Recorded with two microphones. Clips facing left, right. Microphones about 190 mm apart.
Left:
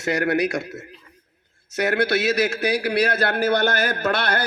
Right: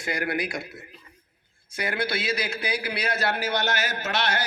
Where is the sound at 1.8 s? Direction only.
70° left (ahead or behind).